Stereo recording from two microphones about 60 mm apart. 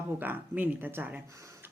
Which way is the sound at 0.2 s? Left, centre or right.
Right.